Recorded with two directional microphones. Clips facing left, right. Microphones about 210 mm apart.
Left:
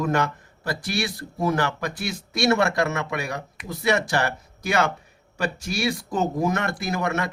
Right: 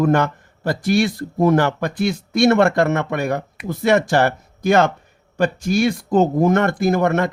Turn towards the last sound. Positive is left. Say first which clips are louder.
# right 9 dB
turn(degrees=-50)  # may be behind; listen again after turning